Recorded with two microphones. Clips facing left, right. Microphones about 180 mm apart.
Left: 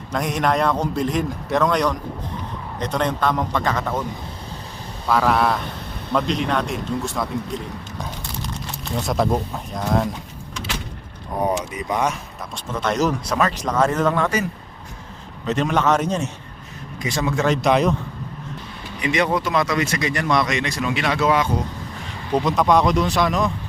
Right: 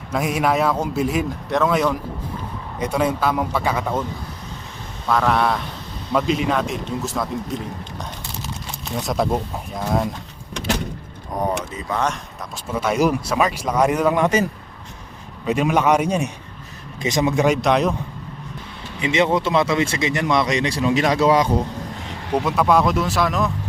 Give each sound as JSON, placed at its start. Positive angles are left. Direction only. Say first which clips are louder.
{"t": 0.1, "sound": "a man's voice", "louder": "right 1 dB", "side_deg": -5}
{"t": 5.0, "sound": "a man's voice", "louder": "even", "side_deg": 0}
{"t": 8.0, "sound": "a sound", "louder": "left 1 dB", "side_deg": 0}
{"t": 11.7, "sound": "speech", "louder": "left 1 dB", "side_deg": 15}
{"t": 12.5, "sound": "speech", "louder": "right 2 dB", "side_deg": -10}
{"t": 15.4, "sound": "speech", "louder": "right 2 dB", "side_deg": -10}
{"t": 17.6, "sound": "a man's voice", "louder": "left 1 dB", "side_deg": 0}
{"t": 18.9, "sound": "speech", "louder": "right 2 dB", "side_deg": -25}
{"t": 20.5, "sound": "a man's voice", "louder": "right 4 dB", "side_deg": -30}
{"t": 22.3, "sound": "a man's voice", "louder": "even", "side_deg": -5}